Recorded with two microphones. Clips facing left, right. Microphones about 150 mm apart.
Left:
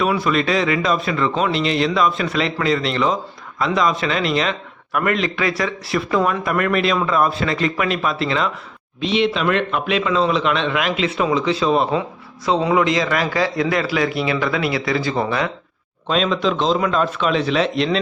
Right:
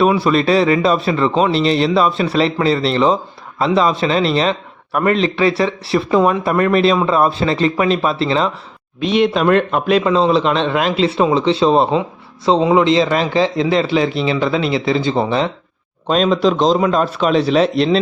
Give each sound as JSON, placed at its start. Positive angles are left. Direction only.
{"t": 0.0, "sound": "speech", "side_deg": -30}
{"t": 9.0, "sound": "a man's voice", "side_deg": -50}
{"t": 16.0, "sound": "speech", "side_deg": -40}